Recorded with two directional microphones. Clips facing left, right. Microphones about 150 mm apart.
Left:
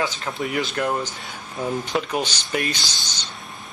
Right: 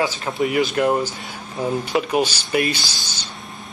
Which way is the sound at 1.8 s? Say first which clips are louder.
Right 5 dB; 10° right (ahead or behind).